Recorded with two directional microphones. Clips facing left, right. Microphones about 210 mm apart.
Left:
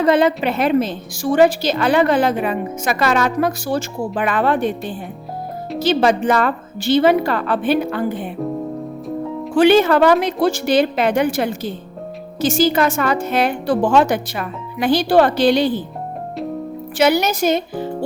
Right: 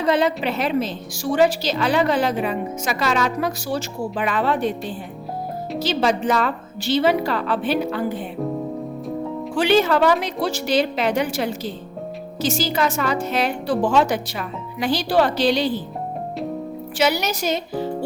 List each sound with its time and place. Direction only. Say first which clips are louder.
0.0 s a woman's voice: left 4 dB; 55° left (ahead or behind)
5.8 s a woman's voice: left 5 dB; 55° left (ahead or behind)
9.6 s a woman's voice: left 5 dB; 55° left (ahead or behind)
17.0 s a woman's voice: left 6 dB; 50° left (ahead or behind)